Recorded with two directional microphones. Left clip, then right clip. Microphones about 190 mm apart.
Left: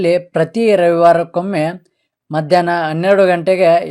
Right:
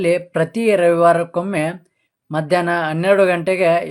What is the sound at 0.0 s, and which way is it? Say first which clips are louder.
Speech: left 3 dB; 30° left (ahead or behind).